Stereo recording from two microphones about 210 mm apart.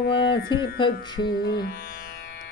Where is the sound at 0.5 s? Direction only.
20° left (ahead or behind).